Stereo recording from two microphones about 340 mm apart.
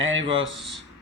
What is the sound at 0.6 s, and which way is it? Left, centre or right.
Speech, centre.